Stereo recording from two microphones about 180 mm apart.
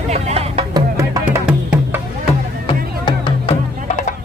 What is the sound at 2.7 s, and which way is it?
Music, 30° left (ahead or behind).